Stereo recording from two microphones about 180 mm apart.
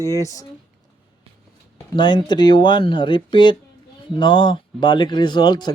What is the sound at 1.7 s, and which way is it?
Speech, 25° left (ahead or behind).